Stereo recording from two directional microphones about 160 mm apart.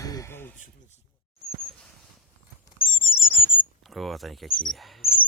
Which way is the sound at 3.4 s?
35° left (ahead or behind).